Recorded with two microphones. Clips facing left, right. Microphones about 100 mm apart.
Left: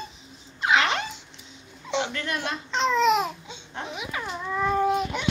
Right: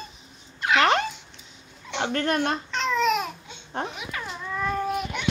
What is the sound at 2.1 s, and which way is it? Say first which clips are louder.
Speech: right 6 dB; 50° right (ahead or behind).